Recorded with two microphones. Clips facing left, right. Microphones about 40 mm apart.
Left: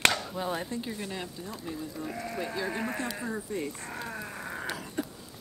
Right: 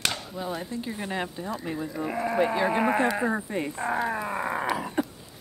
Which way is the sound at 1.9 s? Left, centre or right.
Right.